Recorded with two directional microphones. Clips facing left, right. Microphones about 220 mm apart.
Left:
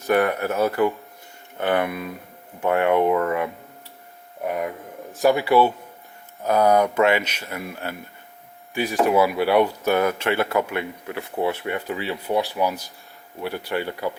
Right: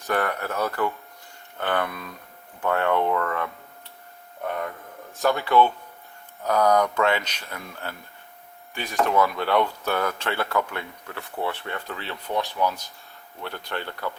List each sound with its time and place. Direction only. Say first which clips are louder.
0.1 s speech: left 6 dB; 15° left (ahead or behind)